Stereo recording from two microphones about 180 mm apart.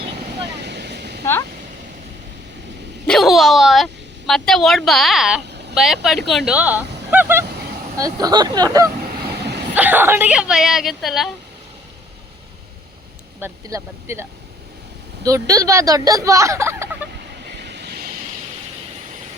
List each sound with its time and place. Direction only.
0.5 s vehicle: 70° right (ahead or behind)
1.2 s a sound: 15° left (ahead or behind)
3.1 s a sound: centre (ahead or behind)
4.3 s speech: centre (ahead or behind); by 8.9 s 20° right (ahead or behind)
9.7 s speech: 10° right (ahead or behind)
13.4 s speech: 15° right (ahead or behind)
17.6 s vehicle: 70° right (ahead or behind)